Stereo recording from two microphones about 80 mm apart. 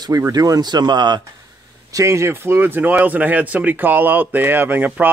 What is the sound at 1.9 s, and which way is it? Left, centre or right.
Speech, right.